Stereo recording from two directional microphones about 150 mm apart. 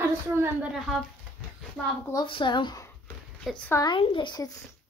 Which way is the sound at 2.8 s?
15° left (ahead or behind).